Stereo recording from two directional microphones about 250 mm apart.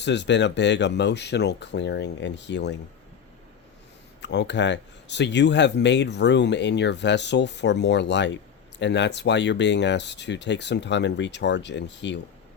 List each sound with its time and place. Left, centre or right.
0.0 s speech: left
4.2 s speech: left